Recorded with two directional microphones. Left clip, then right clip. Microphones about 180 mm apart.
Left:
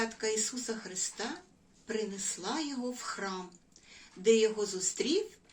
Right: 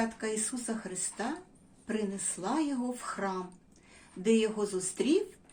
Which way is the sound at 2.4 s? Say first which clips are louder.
Right 5 dB; 40° right (ahead or behind).